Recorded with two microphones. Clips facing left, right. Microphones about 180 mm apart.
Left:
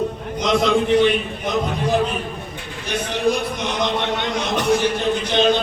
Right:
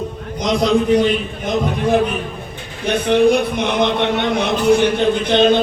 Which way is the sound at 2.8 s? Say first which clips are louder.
Right 8 dB; 55° right (ahead or behind).